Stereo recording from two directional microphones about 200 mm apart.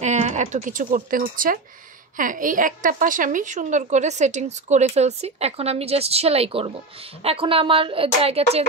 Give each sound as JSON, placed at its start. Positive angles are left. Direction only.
{"t": 0.0, "sound": "a woman's voice", "side_deg": -35}